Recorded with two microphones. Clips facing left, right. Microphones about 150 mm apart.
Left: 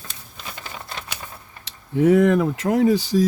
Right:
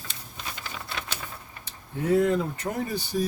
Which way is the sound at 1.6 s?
85° left.